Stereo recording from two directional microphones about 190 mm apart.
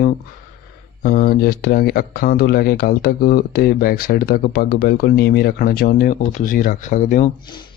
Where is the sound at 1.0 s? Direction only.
50° left (ahead or behind).